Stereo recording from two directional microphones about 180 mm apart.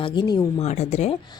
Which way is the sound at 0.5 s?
40° left (ahead or behind).